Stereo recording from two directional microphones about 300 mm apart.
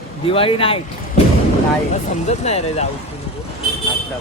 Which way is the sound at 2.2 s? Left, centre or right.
Left.